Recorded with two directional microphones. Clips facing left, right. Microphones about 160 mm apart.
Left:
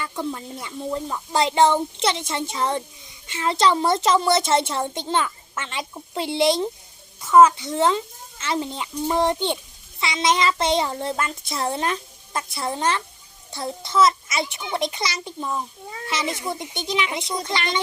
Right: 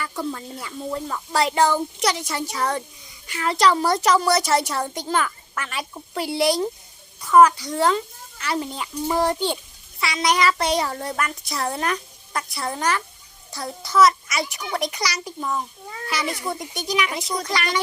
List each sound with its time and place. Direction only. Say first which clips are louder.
0.0 s a child's voice: even; 20° left (ahead or behind)